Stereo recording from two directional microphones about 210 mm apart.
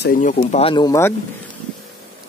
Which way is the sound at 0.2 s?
40° left (ahead or behind).